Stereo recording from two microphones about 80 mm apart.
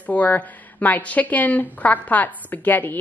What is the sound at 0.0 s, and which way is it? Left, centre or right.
Speech, centre.